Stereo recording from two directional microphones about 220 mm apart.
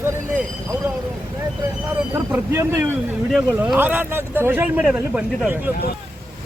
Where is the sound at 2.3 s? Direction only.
10° right (ahead or behind).